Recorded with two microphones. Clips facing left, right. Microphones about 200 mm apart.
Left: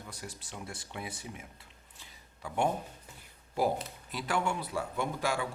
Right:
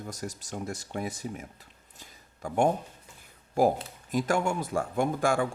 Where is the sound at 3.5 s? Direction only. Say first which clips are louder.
Right 6 dB; 45° right (ahead or behind).